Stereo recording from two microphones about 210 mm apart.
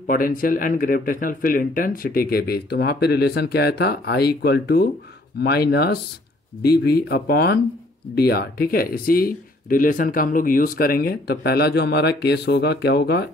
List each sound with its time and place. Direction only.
0.0 s speech: 40° left (ahead or behind)